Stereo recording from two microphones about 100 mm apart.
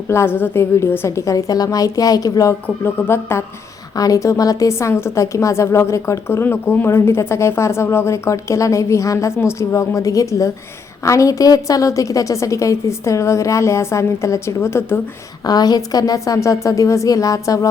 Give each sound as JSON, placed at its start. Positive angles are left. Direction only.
{"t": 0.1, "sound": "a woman's voice", "side_deg": 25}
{"t": 2.8, "sound": "a woman's voice", "side_deg": 25}
{"t": 3.9, "sound": "a woman's voice", "side_deg": 35}
{"t": 15.4, "sound": "a woman's voice", "side_deg": 40}